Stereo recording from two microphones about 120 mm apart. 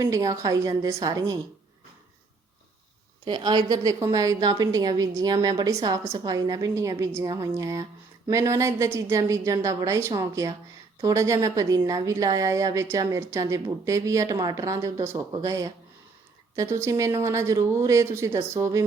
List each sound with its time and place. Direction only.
0.0 s a woman's voice: 30° right (ahead or behind)
3.2 s a woman's voice: 35° right (ahead or behind)